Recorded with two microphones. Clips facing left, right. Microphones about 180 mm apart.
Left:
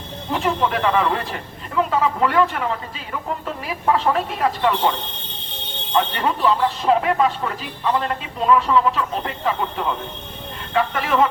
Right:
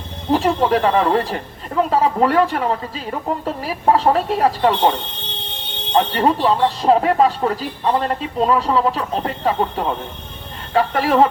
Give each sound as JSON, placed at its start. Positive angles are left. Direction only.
{"t": 0.3, "sound": "speech", "side_deg": -35}